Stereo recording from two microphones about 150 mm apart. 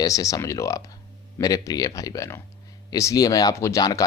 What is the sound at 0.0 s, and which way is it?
A man's voice, 25° left (ahead or behind).